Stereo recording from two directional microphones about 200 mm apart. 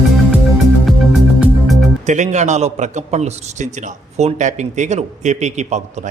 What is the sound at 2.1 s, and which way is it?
A man's voice, 35° right (ahead or behind).